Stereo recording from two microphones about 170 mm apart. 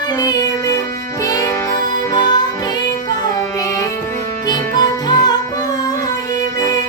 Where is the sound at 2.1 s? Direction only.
25° left (ahead or behind).